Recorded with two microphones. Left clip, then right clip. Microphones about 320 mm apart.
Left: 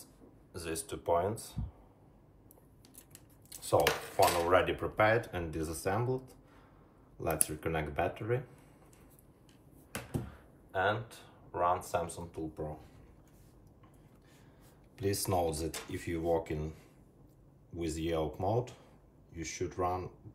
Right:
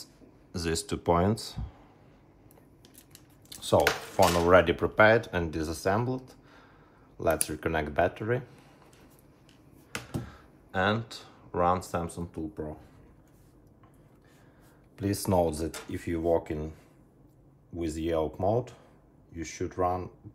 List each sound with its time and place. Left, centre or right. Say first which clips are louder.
0.5 s speech: right 8 dB; right
3.4 s a sound: right 5 dB; right
4.5 s speech: right 7 dB; right
7.2 s speech: right 8 dB; right
10.7 s speech: right 4 dB; right
11.9 s speech: right 1 dB; centre
15.0 s speech: right 5 dB; centre